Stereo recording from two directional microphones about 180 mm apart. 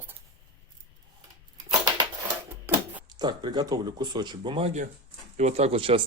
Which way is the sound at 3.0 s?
25° right (ahead or behind).